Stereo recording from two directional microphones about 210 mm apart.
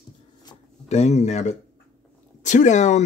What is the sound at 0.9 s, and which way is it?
Speech, 30° left (ahead or behind).